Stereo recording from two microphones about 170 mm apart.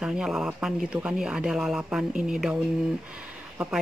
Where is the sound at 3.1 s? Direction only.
10° right (ahead or behind).